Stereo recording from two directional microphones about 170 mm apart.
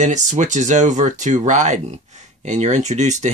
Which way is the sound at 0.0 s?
45° right (ahead or behind).